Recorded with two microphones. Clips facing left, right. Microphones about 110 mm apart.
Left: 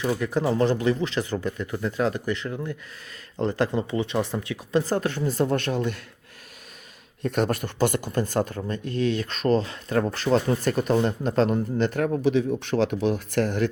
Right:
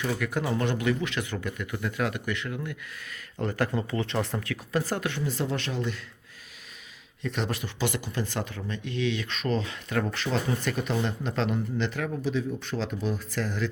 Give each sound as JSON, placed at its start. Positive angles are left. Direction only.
{"t": 0.0, "sound": "speech", "side_deg": 30}
{"t": 7.2, "sound": "speech", "side_deg": 50}